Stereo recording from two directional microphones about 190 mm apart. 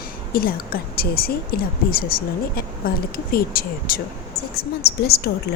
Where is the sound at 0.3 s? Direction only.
50° left (ahead or behind).